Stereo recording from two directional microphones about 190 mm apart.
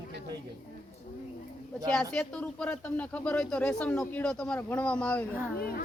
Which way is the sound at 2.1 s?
5° left (ahead or behind).